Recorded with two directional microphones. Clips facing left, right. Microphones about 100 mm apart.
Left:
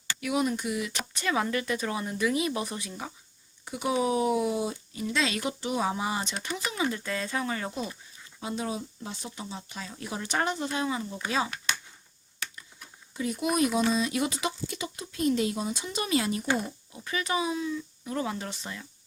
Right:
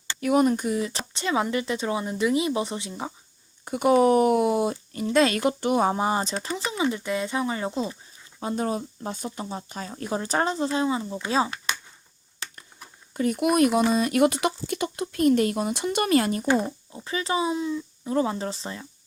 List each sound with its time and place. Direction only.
0.2 s speech: 45° right (ahead or behind); by 3.1 s 25° right (ahead or behind)
3.7 s speech: 55° right (ahead or behind); by 7.9 s 25° right (ahead or behind)
8.4 s speech: 45° right (ahead or behind)
12.5 s a sound: 50° right (ahead or behind)
13.9 s speech: 55° right (ahead or behind); by 18.9 s 30° right (ahead or behind)